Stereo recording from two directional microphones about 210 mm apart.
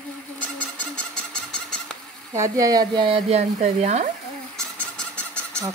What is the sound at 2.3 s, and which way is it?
Speech, 15° right (ahead or behind).